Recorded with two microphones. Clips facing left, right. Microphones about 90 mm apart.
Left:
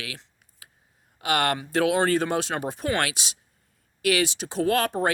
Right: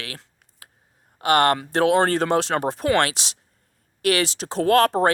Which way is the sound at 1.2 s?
45° right (ahead or behind).